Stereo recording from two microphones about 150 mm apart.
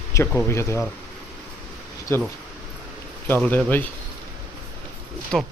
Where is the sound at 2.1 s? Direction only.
15° left (ahead or behind).